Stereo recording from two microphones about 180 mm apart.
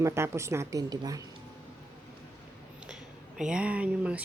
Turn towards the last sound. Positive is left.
turn(degrees=-5)  # may be behind; listen again after turning